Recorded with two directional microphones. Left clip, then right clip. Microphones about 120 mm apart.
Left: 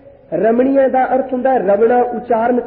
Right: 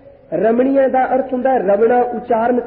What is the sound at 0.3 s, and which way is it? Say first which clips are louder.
A woman's voice: left 1 dB; 30° left (ahead or behind).